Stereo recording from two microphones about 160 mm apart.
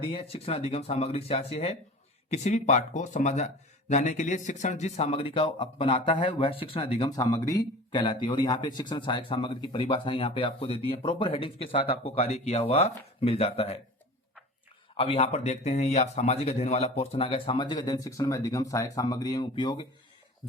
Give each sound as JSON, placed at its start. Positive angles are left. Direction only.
{"t": 0.0, "sound": "speech", "side_deg": 35}
{"t": 7.2, "sound": "speech", "side_deg": 20}
{"t": 14.9, "sound": "speech", "side_deg": 35}